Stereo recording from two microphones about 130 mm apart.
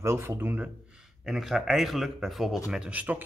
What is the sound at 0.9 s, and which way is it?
Speech, centre (ahead or behind).